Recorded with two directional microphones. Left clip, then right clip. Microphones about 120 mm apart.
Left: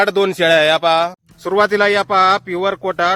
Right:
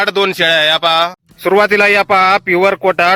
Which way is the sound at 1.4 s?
40° right (ahead or behind).